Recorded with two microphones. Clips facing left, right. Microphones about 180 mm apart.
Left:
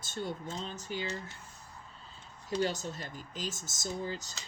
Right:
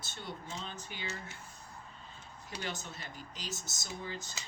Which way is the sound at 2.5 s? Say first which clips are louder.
Left 9 dB; 40° left (ahead or behind).